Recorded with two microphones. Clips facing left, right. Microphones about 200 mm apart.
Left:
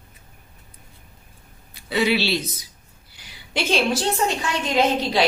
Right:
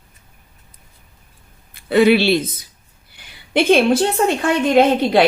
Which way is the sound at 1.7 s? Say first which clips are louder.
Right 9 dB; 55° right (ahead or behind).